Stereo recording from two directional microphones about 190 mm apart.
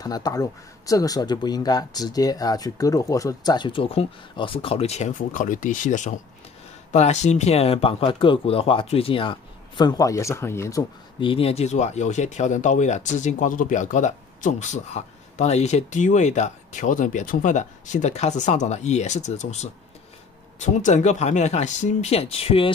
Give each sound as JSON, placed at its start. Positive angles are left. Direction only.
{"t": 0.0, "sound": "speech", "side_deg": 20}